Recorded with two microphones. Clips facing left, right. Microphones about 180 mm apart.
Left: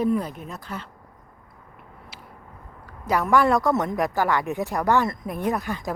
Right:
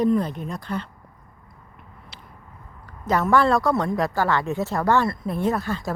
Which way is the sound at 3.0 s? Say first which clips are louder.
Right 1 dB; 10° left (ahead or behind).